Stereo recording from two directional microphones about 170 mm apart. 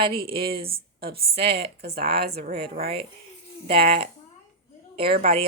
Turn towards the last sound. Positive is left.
turn(degrees=-35)  # may be behind; listen again after turning